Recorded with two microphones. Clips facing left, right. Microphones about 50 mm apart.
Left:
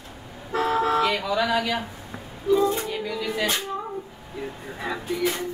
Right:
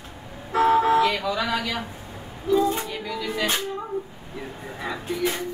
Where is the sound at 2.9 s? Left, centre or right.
Centre.